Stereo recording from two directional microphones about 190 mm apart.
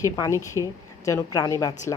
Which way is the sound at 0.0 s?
15° left (ahead or behind).